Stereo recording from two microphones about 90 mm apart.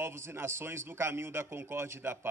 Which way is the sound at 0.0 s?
30° right (ahead or behind).